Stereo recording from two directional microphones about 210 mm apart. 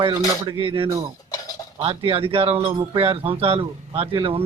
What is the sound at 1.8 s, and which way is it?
Speech, 25° right (ahead or behind).